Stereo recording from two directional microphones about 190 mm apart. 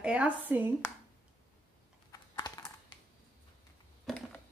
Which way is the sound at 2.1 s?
20° left (ahead or behind).